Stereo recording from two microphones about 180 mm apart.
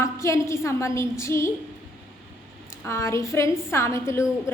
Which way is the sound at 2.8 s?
15° left (ahead or behind).